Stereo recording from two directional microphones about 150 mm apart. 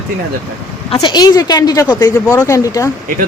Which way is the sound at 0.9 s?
40° left (ahead or behind).